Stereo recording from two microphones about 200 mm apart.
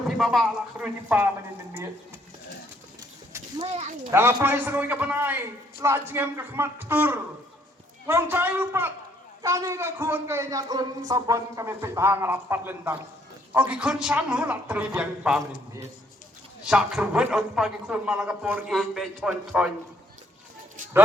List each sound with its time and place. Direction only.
0.2 s a man's voice: centre (ahead or behind)
3.0 s horse: 20° right (ahead or behind)
3.7 s a child's voice: 30° right (ahead or behind)
4.1 s a man's voice: 10° right (ahead or behind)
16.6 s a man's voice: 5° right (ahead or behind)